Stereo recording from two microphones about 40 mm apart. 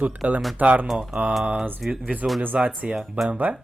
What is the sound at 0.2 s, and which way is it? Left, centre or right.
Speech, right.